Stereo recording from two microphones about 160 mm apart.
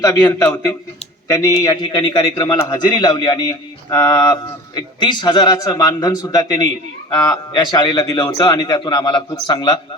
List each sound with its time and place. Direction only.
0.0 s a man's voice: 20° left (ahead or behind)